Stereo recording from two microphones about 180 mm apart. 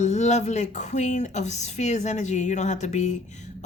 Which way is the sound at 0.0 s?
40° left (ahead or behind).